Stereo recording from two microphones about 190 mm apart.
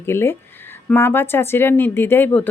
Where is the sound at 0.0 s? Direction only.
10° left (ahead or behind).